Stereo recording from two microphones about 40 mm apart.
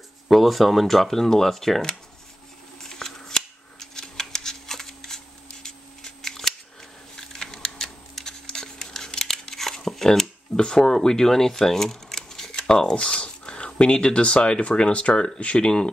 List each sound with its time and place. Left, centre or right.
0.3 s speech: centre
2.8 s scissors: centre
7.2 s a sound: centre
10.6 s speech: centre
15.1 s speech: centre
15.4 s speech: left